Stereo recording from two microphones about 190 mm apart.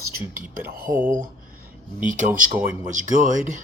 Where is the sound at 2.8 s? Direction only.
40° right (ahead or behind).